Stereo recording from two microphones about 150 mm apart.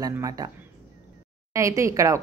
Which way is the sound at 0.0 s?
25° right (ahead or behind).